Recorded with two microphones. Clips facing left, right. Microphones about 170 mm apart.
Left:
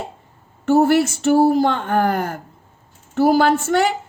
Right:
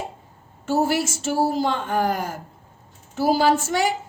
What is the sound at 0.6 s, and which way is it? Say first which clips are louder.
A woman's voice: left 7 dB; 60° left (ahead or behind).